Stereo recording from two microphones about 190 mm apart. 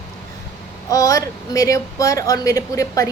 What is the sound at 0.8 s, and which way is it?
A woman's voice, 20° left (ahead or behind).